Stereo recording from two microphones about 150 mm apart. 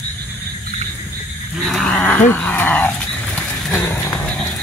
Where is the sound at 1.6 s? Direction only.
Centre (ahead or behind).